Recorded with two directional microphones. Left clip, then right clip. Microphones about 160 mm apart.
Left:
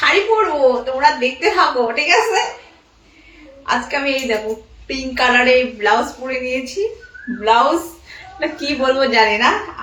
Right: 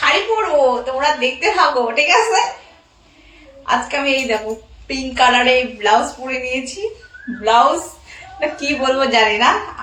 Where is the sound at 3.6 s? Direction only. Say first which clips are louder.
Right 1 dB; 15° left (ahead or behind).